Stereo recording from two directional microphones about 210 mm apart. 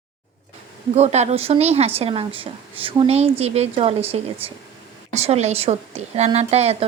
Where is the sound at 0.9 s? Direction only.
30° right (ahead or behind).